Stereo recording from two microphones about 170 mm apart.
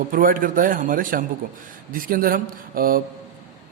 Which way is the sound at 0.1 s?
55° right (ahead or behind).